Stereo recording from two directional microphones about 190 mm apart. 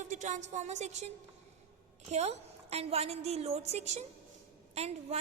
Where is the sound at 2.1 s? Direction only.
35° right (ahead or behind).